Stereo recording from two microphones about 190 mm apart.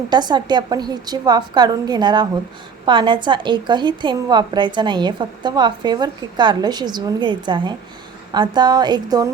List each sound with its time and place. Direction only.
0.1 s a woman's voice: 25° right (ahead or behind)